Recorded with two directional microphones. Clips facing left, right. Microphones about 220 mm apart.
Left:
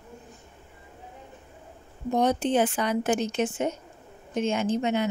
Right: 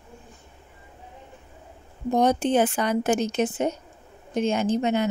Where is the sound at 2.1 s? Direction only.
45° right (ahead or behind).